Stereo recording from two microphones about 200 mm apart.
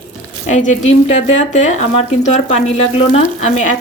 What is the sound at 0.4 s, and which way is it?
Speech, 35° left (ahead or behind).